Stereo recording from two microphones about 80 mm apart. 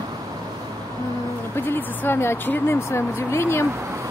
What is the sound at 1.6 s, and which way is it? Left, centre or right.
Speech, left.